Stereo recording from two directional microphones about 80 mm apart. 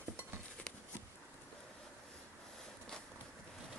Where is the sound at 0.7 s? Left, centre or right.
Centre.